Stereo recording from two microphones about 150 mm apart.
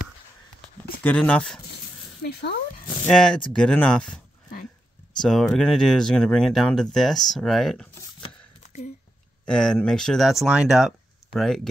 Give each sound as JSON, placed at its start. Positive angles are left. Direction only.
{"t": 1.0, "sound": "speech", "side_deg": 10}
{"t": 2.2, "sound": "speech", "side_deg": 90}
{"t": 3.1, "sound": "speech", "side_deg": 5}
{"t": 5.2, "sound": "speech", "side_deg": 5}
{"t": 9.5, "sound": "speech", "side_deg": 5}